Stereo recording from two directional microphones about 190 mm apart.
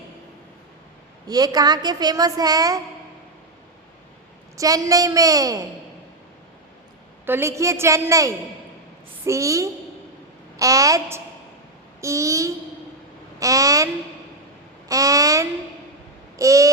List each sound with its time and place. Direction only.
1.3 s a woman's voice: 20° right (ahead or behind)
4.5 s a woman's voice: 20° right (ahead or behind)
7.3 s a woman's voice: 15° right (ahead or behind)
14.8 s a sound: 15° right (ahead or behind)
16.4 s a woman's voice: 15° right (ahead or behind)